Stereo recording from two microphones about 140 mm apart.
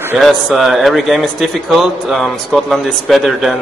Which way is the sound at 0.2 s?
Centre (ahead or behind).